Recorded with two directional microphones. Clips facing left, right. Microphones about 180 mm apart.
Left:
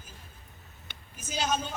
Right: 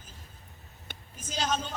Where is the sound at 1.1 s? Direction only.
10° left (ahead or behind).